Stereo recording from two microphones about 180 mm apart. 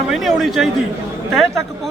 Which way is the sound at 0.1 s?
Centre (ahead or behind).